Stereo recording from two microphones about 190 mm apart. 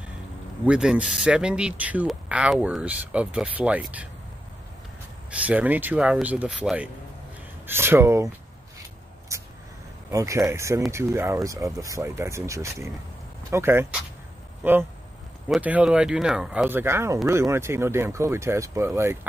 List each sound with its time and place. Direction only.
0.7 s speech: 5° right (ahead or behind)
5.5 s speech: 10° right (ahead or behind)
9.3 s a sound: 15° right (ahead or behind)
10.1 s speech: 15° right (ahead or behind)